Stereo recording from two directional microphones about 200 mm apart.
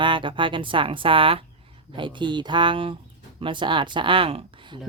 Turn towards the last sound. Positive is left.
turn(degrees=-25)  # may be behind; listen again after turning